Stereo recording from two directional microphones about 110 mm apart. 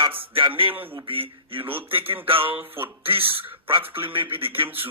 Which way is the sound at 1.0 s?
55° right (ahead or behind).